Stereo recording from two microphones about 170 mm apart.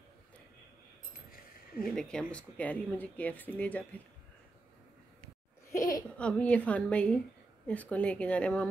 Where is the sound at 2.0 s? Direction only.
5° left (ahead or behind).